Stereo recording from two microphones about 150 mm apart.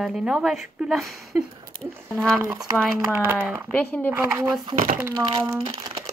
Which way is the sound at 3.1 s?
15° right (ahead or behind).